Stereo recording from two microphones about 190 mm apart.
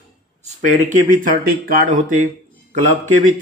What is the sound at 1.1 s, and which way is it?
Speech, 45° right (ahead or behind).